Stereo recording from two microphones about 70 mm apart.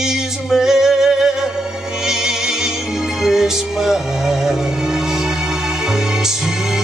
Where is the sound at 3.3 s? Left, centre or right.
Centre.